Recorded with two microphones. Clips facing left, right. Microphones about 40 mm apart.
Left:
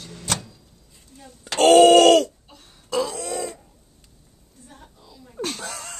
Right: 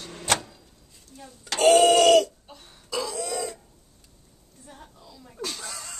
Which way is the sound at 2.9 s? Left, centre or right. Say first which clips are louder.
Left 4 dB; left.